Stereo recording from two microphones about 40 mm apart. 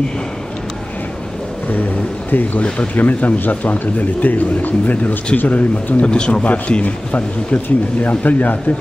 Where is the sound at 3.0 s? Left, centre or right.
Left.